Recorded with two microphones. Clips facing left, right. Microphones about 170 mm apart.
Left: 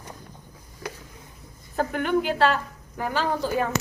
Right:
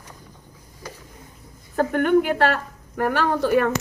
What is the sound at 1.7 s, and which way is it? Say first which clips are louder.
A woman's voice: right 6 dB; 50° right (ahead or behind).